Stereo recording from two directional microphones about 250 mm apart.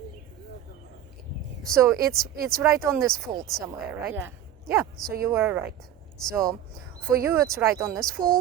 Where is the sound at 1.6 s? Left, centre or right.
Centre.